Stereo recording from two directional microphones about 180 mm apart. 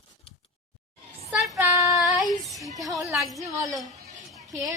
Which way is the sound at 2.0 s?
Centre (ahead or behind).